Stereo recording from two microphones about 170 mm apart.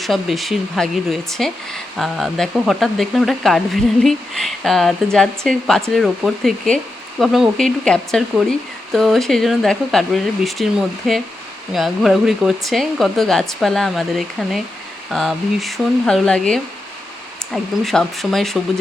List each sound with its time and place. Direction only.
0.0 s speech: centre (ahead or behind)